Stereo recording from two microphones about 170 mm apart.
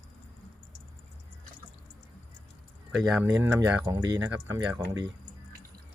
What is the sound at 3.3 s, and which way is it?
Speech, 20° right (ahead or behind).